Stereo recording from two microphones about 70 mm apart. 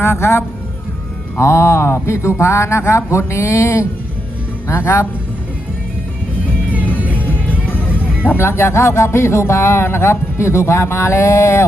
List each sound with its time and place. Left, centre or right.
0.0 s speech: left
7.0 s music: right
7.4 s music: left
8.2 s speech: left